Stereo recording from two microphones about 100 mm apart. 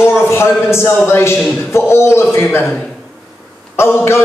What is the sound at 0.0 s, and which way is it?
A man's voice, 25° left (ahead or behind).